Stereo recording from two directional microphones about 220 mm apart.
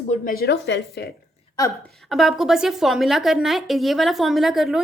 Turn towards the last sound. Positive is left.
turn(degrees=0)  # may be behind; listen again after turning